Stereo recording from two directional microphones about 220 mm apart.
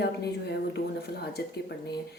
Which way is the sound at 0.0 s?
50° left (ahead or behind).